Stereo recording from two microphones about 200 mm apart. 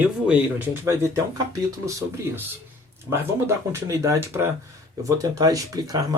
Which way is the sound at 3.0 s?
15° right (ahead or behind).